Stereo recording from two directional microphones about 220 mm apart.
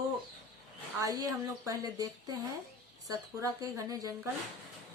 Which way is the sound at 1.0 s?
15° right (ahead or behind).